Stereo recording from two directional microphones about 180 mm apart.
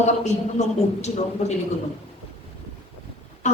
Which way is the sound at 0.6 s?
40° left (ahead or behind).